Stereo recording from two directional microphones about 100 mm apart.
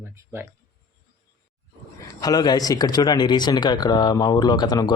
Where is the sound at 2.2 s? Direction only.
40° left (ahead or behind).